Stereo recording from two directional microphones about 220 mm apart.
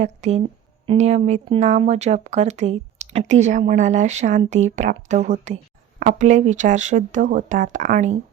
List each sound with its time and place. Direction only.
0.0 s speech: 30° right (ahead or behind)